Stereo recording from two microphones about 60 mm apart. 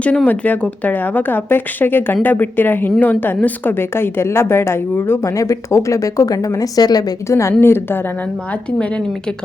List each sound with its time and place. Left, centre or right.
0.3 s a woman's voice: left
5.2 s speech: left
7.3 s speech: left
7.6 s a woman's voice: left